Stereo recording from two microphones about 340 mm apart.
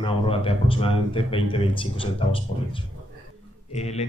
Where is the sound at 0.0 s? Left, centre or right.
Centre.